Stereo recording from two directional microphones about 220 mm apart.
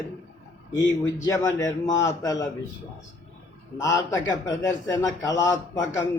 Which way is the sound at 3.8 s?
15° left (ahead or behind).